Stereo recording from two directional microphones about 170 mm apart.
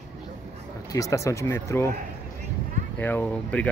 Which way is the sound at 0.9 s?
20° left (ahead or behind).